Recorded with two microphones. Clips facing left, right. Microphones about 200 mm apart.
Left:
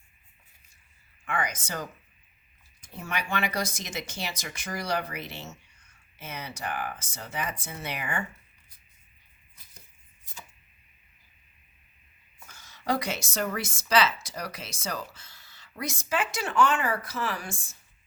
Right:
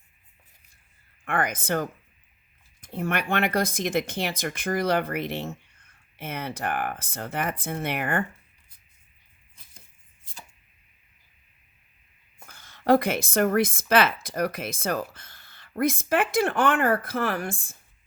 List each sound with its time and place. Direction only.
1.2 s speech: 55° right (ahead or behind)
12.5 s speech: 55° right (ahead or behind)